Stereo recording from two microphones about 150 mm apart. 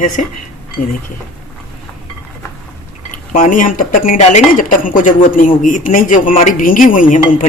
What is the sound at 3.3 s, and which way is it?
Speech, 55° left (ahead or behind).